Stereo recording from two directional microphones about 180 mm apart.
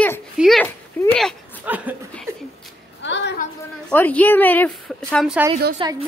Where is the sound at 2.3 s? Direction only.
15° right (ahead or behind).